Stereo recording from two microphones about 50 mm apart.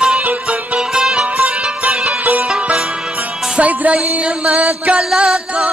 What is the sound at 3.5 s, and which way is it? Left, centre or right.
Music, right.